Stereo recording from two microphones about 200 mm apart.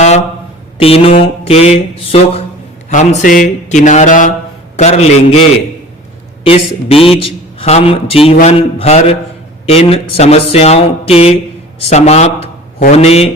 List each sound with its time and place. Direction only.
0.8 s a man's voice: 30° left (ahead or behind)
6.4 s a man's voice: 30° left (ahead or behind)